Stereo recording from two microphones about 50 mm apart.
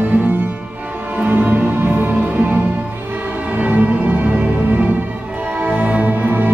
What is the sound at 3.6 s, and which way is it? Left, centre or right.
Music, right.